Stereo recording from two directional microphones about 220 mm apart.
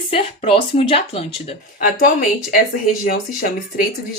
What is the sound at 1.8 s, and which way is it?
Speech, 40° left (ahead or behind).